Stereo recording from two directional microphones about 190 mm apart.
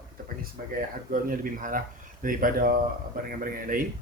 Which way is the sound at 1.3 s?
45° right (ahead or behind).